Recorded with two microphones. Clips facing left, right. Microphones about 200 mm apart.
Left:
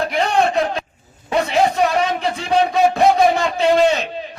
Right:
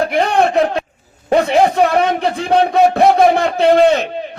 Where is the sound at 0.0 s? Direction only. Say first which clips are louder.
Right 3 dB; 55° right (ahead or behind).